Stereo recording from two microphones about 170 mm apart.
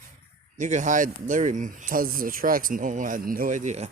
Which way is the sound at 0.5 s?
45° right (ahead or behind).